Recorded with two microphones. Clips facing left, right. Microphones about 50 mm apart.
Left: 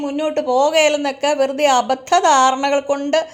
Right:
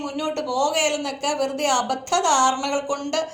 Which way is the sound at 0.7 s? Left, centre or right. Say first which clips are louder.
Left 8 dB; left.